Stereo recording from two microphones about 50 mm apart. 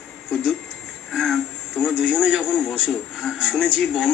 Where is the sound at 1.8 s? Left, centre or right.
Centre.